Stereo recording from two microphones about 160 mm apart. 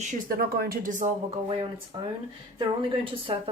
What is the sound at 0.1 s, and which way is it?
Speech, 65° right (ahead or behind).